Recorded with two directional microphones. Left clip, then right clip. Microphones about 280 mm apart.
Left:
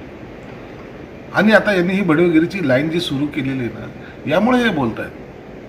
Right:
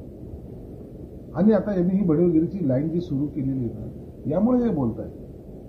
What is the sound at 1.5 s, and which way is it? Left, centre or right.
Speech, centre.